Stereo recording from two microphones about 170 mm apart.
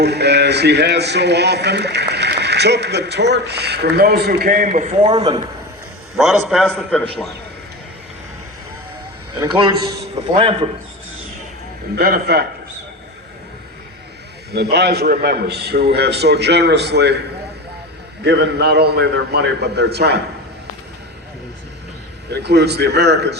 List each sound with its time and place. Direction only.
0.0 s a man's voice: 75° right (ahead or behind); by 5.1 s 45° right (ahead or behind)
5.1 s a man's voice: 25° right (ahead or behind)
6.1 s a man's voice: centre (ahead or behind)
9.4 s a man's voice: 25° right (ahead or behind)
11.9 s a man's voice: 70° right (ahead or behind)
14.5 s a man's voice: 75° right (ahead or behind)
22.3 s a man's voice: 75° right (ahead or behind)